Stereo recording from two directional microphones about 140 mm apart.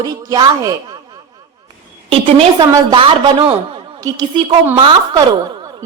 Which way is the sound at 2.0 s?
40° right (ahead or behind).